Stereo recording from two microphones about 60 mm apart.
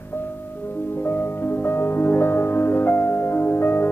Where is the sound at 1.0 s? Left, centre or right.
Left.